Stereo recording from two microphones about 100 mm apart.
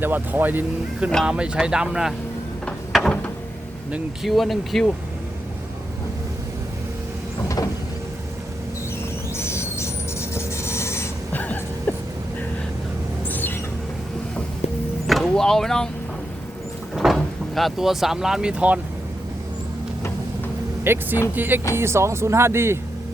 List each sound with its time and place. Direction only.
0.0 s speech: 20° right (ahead or behind); by 2.1 s 5° right (ahead or behind)
2.9 s a sound: 5° left (ahead or behind)
4.2 s speech: centre (ahead or behind)
7.4 s vehicle: 35° left (ahead or behind)
9.3 s train: 25° left (ahead or behind)
13.3 s a sound: 20° left (ahead or behind)
15.0 s vehicle: centre (ahead or behind)
16.9 s speech: centre (ahead or behind)
20.8 s speech: 25° right (ahead or behind)